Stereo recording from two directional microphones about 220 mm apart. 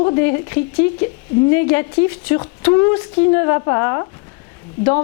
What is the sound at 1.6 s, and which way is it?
Speech, 15° left (ahead or behind).